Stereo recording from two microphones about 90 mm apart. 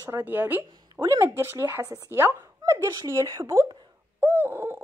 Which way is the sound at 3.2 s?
40° right (ahead or behind).